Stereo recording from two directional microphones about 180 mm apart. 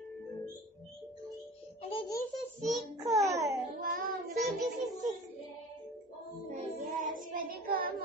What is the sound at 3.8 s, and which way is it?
Child singing, 50° right (ahead or behind).